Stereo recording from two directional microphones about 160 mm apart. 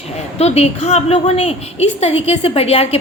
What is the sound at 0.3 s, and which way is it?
A woman's voice, 40° left (ahead or behind).